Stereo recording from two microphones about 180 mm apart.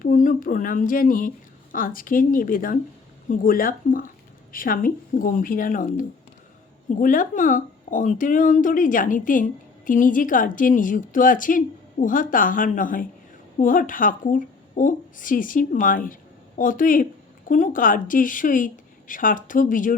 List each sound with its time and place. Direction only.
0.0 s a woman's voice: 45° left (ahead or behind)